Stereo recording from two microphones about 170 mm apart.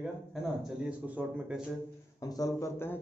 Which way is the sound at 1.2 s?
5° right (ahead or behind).